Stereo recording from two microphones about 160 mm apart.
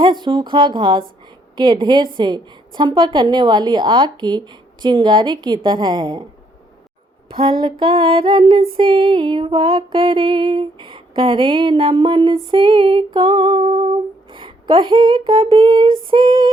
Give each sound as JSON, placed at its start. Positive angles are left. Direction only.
{"t": 0.0, "sound": "female singing", "side_deg": -30}
{"t": 1.5, "sound": "a woman's voice", "side_deg": -30}
{"t": 7.3, "sound": "female singing", "side_deg": -35}